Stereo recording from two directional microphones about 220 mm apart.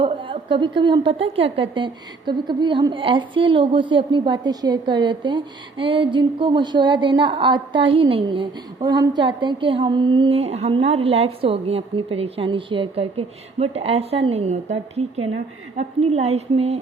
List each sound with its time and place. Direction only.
0.0 s a woman's voice: 25° right (ahead or behind)